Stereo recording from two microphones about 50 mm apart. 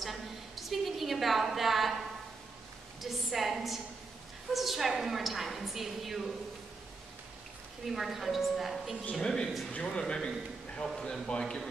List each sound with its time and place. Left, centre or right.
0.0 s a sound: centre
3.0 s a woman's voice: centre
7.8 s a woman's voice: centre
9.2 s speech: centre